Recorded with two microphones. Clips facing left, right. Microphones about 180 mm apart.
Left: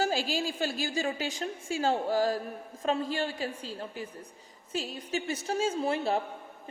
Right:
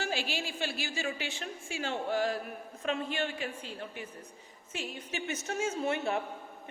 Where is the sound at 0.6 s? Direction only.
40° left (ahead or behind).